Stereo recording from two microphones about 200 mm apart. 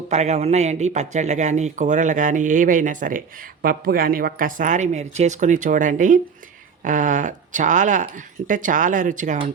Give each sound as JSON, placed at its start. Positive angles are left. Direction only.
{"t": 0.1, "sound": "a man's voice", "side_deg": -35}